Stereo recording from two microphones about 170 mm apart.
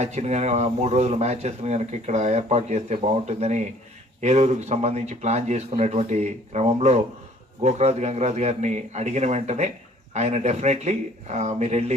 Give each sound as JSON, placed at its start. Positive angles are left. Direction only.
{"t": 0.0, "sound": "speech", "side_deg": -40}